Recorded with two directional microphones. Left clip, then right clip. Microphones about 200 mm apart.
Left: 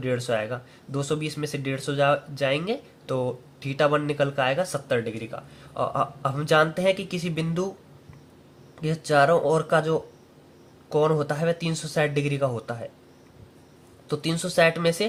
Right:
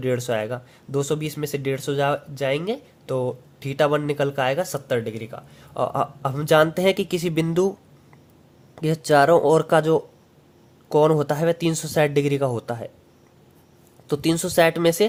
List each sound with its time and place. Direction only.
0.0 s speech: 35° right (ahead or behind)
8.7 s speech: 40° right (ahead or behind)
14.1 s speech: 40° right (ahead or behind)